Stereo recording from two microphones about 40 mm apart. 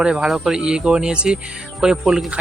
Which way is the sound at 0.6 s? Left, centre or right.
Right.